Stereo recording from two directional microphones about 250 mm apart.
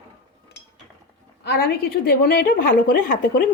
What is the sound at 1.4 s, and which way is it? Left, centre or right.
A woman's voice, left.